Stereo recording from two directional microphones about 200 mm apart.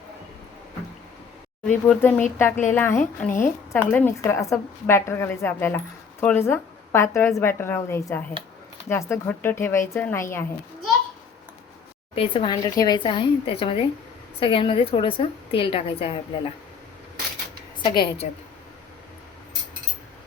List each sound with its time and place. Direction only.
1.6 s a woman's voice: 5° left (ahead or behind)
12.1 s a woman's voice: 25° left (ahead or behind)
17.8 s a woman's voice: 25° left (ahead or behind)